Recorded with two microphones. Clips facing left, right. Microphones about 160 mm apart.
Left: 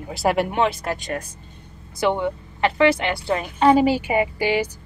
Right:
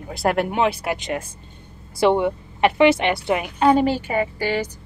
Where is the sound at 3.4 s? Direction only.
Centre (ahead or behind).